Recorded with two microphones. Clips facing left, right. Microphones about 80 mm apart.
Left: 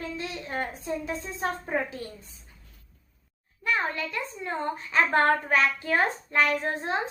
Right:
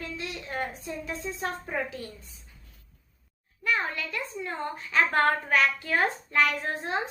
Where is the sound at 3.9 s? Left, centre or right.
Left.